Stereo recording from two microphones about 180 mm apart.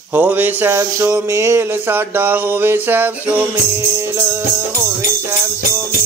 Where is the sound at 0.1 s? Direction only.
10° right (ahead or behind).